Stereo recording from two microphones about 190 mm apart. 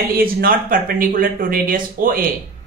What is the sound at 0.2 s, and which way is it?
Speech, 50° right (ahead or behind).